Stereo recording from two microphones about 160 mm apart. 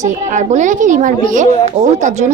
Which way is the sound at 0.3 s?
50° right (ahead or behind).